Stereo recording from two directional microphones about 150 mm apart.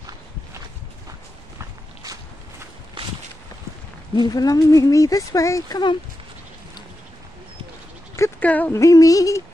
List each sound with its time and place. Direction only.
3.0 s walk: 35° right (ahead or behind)
4.1 s speech: 25° left (ahead or behind)
8.2 s a sound: 10° left (ahead or behind)
8.8 s speech: 25° left (ahead or behind)